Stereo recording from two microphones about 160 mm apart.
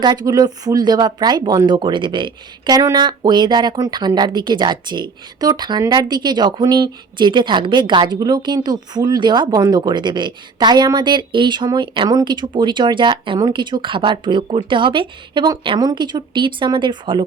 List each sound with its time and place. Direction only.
0.0 s speech: 25° right (ahead or behind)